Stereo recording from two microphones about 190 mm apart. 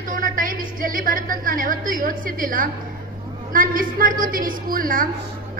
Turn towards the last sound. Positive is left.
turn(degrees=-45)  # may be behind; listen again after turning